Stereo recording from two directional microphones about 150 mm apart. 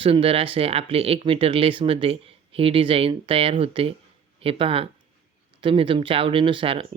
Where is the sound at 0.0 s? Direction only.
40° right (ahead or behind).